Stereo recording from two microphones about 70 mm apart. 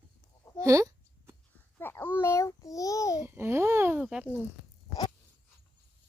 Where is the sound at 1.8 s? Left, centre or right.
Left.